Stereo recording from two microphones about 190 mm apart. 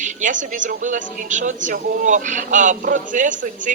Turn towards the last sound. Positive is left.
turn(degrees=-40)  # may be behind; listen again after turning